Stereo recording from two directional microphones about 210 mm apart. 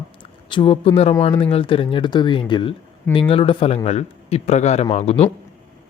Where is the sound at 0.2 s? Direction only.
25° left (ahead or behind).